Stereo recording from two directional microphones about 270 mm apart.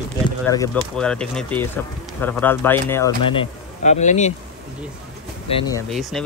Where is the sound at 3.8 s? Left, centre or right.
Left.